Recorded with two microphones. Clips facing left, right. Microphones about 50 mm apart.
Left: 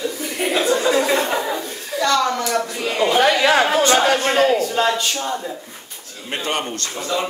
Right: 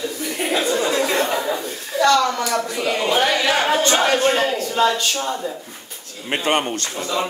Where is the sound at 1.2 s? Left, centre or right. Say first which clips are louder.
Even; centre.